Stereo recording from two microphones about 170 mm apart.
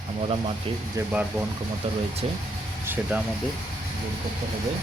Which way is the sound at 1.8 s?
30° right (ahead or behind).